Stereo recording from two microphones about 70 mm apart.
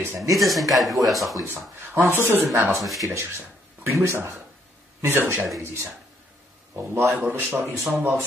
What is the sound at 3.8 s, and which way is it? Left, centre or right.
Speech, right.